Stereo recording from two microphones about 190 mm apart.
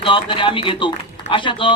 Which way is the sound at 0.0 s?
25° left (ahead or behind).